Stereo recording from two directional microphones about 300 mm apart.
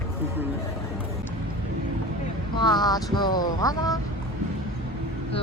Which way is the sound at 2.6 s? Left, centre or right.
Centre.